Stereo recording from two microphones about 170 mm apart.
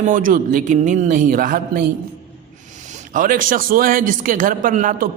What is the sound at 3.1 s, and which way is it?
Speech, 50° right (ahead or behind).